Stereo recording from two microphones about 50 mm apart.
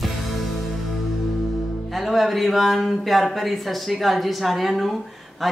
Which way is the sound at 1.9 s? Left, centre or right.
Centre.